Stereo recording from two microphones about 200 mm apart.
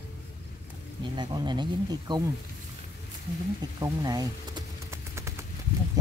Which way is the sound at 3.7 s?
20° right (ahead or behind).